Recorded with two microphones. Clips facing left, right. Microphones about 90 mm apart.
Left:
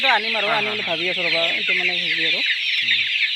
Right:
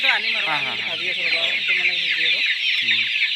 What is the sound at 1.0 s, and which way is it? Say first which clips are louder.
Chicken: left 4 dB; 85° left.